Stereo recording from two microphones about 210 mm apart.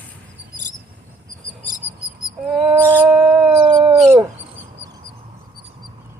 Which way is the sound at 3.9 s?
5° right (ahead or behind).